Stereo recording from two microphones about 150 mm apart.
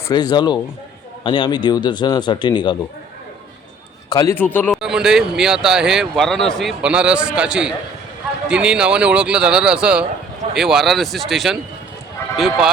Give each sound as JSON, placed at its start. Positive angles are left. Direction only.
{"t": 0.1, "sound": "a man's voice", "side_deg": 25}
{"t": 4.1, "sound": "a man's voice", "side_deg": 20}
{"t": 4.7, "sound": "speech", "side_deg": -5}